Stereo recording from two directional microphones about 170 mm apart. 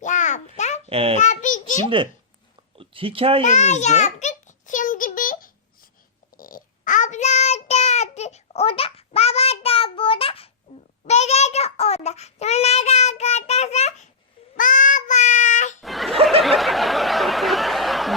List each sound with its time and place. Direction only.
0.0 s babbling: 45° left (ahead or behind)
0.9 s a child's voice: 35° right (ahead or behind)
1.2 s a child's voice: 45° left (ahead or behind)
2.7 s speech: 35° right (ahead or behind)
3.4 s a sound: 45° left (ahead or behind)
6.3 s child singing: 55° left (ahead or behind); by 14.1 s 40° left (ahead or behind)
14.5 s child singing: 50° left (ahead or behind)
15.8 s a sound: centre (ahead or behind)